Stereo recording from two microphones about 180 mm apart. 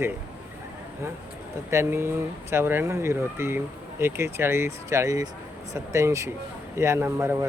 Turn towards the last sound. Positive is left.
turn(degrees=-15)  # may be behind; listen again after turning